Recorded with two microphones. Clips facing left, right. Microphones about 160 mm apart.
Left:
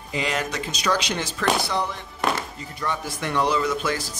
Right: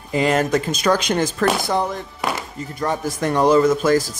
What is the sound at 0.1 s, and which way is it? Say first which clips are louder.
Speech: right 9 dB; 45° right (ahead or behind).